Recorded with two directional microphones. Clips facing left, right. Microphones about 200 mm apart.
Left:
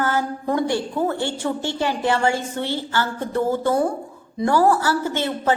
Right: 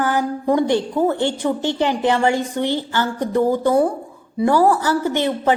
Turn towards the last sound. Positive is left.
turn(degrees=-15)  # may be behind; listen again after turning